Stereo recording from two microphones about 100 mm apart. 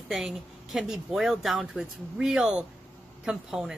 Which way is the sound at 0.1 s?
Centre (ahead or behind).